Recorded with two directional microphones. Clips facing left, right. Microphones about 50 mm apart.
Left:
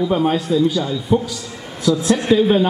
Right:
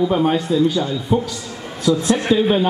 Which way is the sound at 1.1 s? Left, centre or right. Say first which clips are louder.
Left 2 dB; centre.